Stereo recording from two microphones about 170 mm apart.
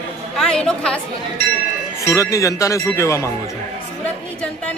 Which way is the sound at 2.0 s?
15° left (ahead or behind).